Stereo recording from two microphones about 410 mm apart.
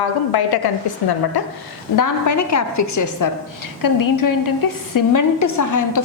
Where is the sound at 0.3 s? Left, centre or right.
Left.